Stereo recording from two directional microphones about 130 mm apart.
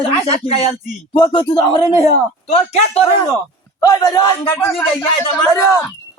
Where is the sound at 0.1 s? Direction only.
50° left (ahead or behind).